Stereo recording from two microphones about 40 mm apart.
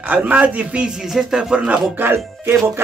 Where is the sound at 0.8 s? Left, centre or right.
Centre.